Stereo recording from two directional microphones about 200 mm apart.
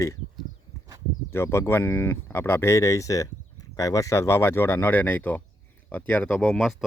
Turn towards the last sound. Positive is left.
turn(degrees=0)  # may be behind; listen again after turning